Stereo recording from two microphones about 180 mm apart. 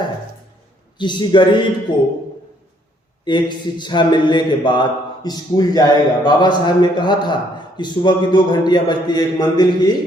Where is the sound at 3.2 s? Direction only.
25° left (ahead or behind).